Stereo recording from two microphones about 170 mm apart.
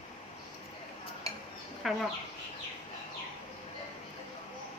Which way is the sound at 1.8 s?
Centre (ahead or behind).